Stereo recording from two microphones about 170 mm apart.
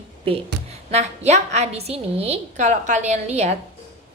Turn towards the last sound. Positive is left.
turn(degrees=-40)  # may be behind; listen again after turning